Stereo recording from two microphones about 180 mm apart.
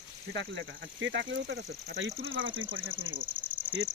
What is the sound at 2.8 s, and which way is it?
Speech, 10° right (ahead or behind).